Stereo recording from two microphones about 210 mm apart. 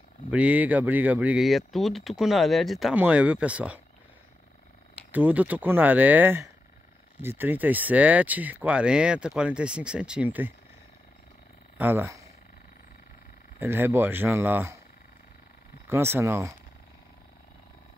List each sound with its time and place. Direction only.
0.3 s speech: 5° right (ahead or behind)
5.1 s speech: 10° right (ahead or behind)
11.8 s speech: 10° right (ahead or behind)
13.6 s speech: 10° right (ahead or behind)
15.9 s speech: 10° right (ahead or behind)